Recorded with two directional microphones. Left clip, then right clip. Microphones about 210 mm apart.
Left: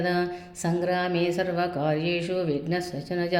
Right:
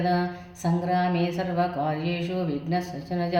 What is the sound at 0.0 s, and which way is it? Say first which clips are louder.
A woman's voice: even; 45° left (ahead or behind).